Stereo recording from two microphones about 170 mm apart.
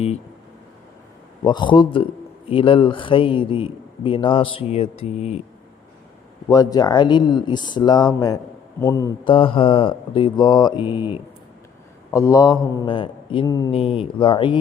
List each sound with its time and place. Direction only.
1.5 s a man's voice: 25° left (ahead or behind)
6.5 s speech: 20° left (ahead or behind)
12.1 s a man's voice: 20° left (ahead or behind)